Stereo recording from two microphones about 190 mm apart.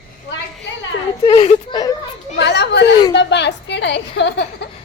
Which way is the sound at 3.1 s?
65° left (ahead or behind).